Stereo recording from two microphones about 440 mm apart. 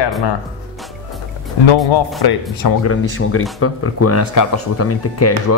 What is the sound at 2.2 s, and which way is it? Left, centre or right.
Speech, left.